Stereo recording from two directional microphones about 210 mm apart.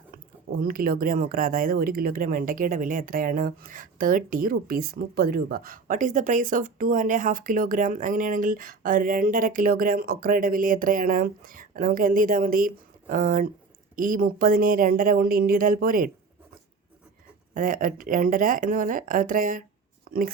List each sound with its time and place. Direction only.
0.5 s speech: 45° right (ahead or behind)
17.5 s speech: 40° right (ahead or behind)